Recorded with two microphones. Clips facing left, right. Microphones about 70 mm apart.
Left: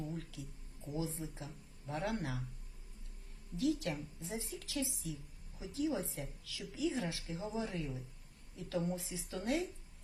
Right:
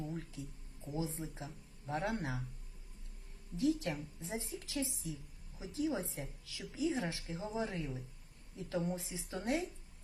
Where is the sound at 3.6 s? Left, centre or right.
Right.